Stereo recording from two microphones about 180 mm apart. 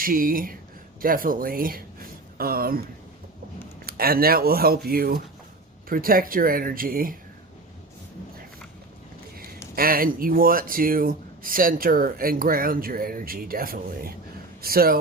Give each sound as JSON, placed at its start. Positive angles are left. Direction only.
{"t": 0.0, "sound": "speech", "side_deg": -50}
{"t": 3.8, "sound": "speech", "side_deg": -55}
{"t": 9.7, "sound": "speech", "side_deg": -55}